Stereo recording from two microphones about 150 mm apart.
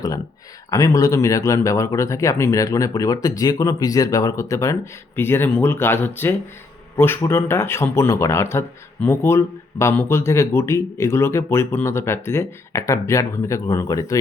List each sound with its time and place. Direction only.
0.7 s speech: 25° left (ahead or behind)